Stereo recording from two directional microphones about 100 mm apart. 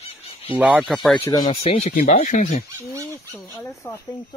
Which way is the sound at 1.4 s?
75° left (ahead or behind).